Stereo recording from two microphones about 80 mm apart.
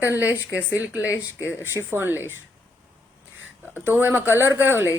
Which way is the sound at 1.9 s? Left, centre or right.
Right.